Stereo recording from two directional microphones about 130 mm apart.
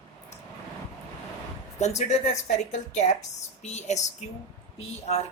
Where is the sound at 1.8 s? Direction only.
65° left (ahead or behind).